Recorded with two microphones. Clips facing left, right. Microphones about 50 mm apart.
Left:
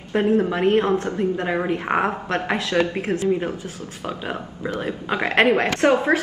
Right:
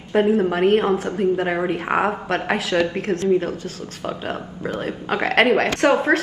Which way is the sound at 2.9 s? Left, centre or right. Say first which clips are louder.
Right 2 dB; centre.